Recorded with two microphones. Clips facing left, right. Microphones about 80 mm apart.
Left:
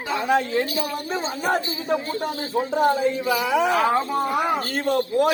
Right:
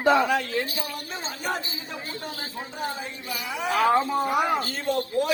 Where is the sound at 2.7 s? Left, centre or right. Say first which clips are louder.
Left 14 dB; left.